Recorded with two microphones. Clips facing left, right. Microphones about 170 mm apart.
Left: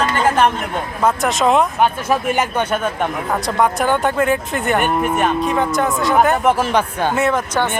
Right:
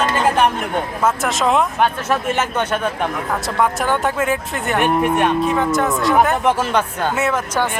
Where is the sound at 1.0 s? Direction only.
Centre (ahead or behind).